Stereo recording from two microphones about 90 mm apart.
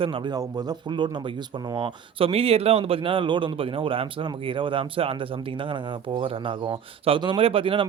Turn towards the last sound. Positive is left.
turn(degrees=-80)